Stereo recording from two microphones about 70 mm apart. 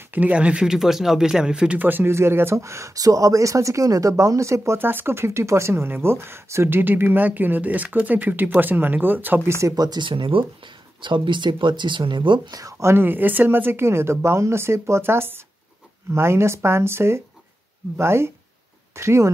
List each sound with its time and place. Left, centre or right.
0.1 s speech: right
0.7 s speech: centre
1.8 s speech: right
4.7 s speech: right
6.8 s speech: right
9.5 s speech: right
9.8 s speech: right
11.3 s speech: right
12.8 s speech: right